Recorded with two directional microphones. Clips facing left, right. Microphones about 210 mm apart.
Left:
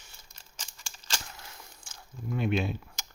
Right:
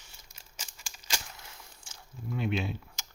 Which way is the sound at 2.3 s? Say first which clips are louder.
Left 3 dB; 50° left (ahead or behind).